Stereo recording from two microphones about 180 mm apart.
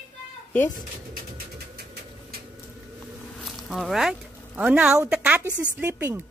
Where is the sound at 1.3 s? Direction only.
60° right (ahead or behind).